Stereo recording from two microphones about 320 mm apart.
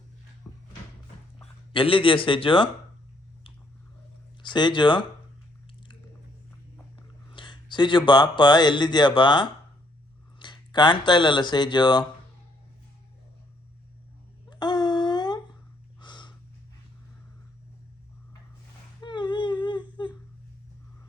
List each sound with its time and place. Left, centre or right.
1.4 s speech: centre
4.4 s speech: centre
7.3 s speech: centre
14.5 s a sound: centre
16.0 s snort: centre
19.0 s whimper: centre